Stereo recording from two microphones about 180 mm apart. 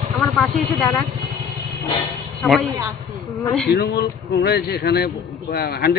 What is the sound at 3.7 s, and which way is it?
A man's voice, 65° left (ahead or behind).